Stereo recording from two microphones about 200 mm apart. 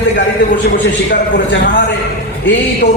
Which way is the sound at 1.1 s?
60° left (ahead or behind).